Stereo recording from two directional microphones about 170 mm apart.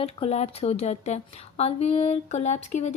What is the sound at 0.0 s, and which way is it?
A woman's voice, 35° left (ahead or behind).